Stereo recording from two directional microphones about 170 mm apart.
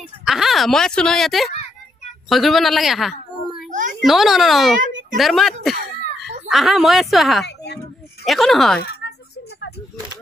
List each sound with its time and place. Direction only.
0.2 s a woman's voice: centre (ahead or behind)
7.4 s a sound: 80° left
8.3 s speech: centre (ahead or behind)